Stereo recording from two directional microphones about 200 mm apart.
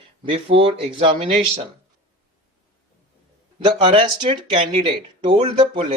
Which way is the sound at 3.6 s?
25° right (ahead or behind).